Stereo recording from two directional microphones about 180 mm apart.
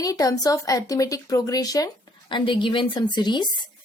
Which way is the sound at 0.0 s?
20° left (ahead or behind).